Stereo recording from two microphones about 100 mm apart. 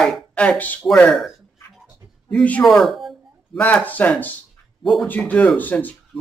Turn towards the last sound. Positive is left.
turn(degrees=15)  # may be behind; listen again after turning